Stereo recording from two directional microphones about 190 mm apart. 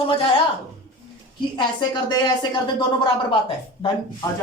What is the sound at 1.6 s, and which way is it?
Speech, 25° left (ahead or behind).